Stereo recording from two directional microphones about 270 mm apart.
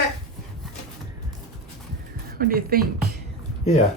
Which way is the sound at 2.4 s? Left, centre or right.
Right.